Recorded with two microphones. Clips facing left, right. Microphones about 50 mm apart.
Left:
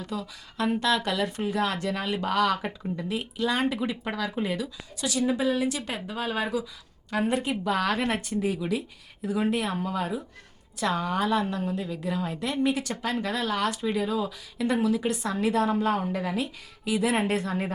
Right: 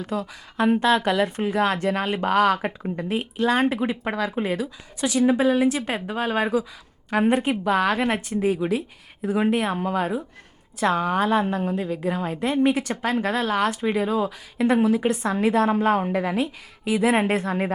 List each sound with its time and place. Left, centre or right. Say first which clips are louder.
0.0 s a woman's voice: right 6 dB; right; by 8.4 s centre
8.4 s a woman's voice: right 7 dB; right